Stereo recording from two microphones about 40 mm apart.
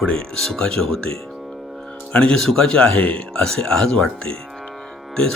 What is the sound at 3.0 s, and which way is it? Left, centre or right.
Speech, left.